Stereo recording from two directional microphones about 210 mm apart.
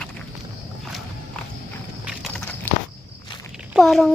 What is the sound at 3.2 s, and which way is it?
Walk, 20° left (ahead or behind).